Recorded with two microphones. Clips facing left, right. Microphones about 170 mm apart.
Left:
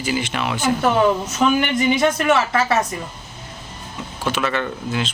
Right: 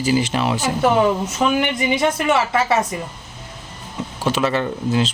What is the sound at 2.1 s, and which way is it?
Speech, 25° right (ahead or behind).